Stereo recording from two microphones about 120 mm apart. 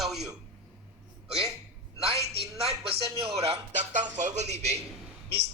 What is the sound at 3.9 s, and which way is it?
Speech, 80° right.